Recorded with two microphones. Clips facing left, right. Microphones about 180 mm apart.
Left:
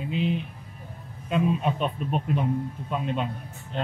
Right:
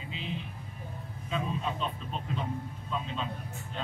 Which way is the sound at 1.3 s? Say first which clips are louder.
Left 9 dB; 65° left (ahead or behind).